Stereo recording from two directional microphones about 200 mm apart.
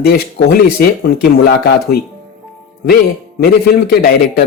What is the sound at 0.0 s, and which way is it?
A man's voice, 50° left (ahead or behind).